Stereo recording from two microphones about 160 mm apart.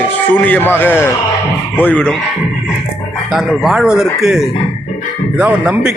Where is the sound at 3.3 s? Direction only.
Centre (ahead or behind).